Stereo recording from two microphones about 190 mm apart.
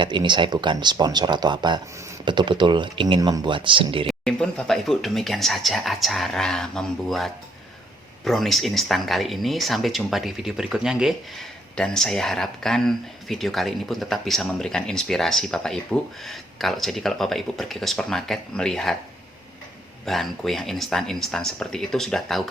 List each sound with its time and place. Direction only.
0.0 s speech: 25° right (ahead or behind)
4.2 s speech: 5° left (ahead or behind)
20.1 s speech: centre (ahead or behind)